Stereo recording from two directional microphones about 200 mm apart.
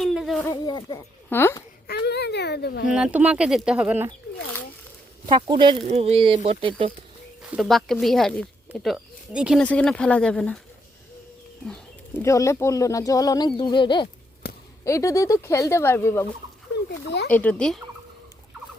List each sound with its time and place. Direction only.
0.0 s a sound: centre (ahead or behind)
0.4 s speech: 20° left (ahead or behind)
1.9 s a sound: 55° left (ahead or behind)
2.9 s speech: 5° right (ahead or behind)
5.3 s speech: 20° right (ahead or behind)
7.4 s speech: 5° right (ahead or behind)
11.6 s bird: 5° left (ahead or behind)
12.2 s speech: 15° left (ahead or behind)
16.7 s speech: 55° left (ahead or behind)
17.3 s speech: 5° left (ahead or behind)